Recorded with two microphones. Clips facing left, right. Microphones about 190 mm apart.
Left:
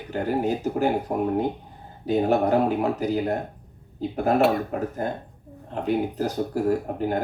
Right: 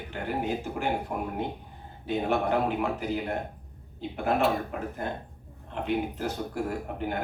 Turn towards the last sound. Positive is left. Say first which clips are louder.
# left 6 dB
turn(degrees=40)  # may be behind; listen again after turning